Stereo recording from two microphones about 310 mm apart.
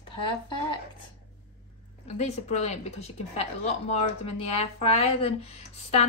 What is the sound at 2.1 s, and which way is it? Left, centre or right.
A woman's voice, left.